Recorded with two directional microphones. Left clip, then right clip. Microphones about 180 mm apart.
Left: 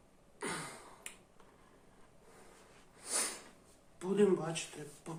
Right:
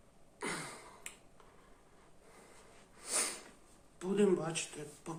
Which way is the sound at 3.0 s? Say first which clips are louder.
Right 1 dB; 5° right (ahead or behind).